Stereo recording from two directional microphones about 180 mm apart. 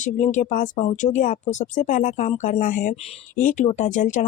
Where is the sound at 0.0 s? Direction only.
45° left (ahead or behind).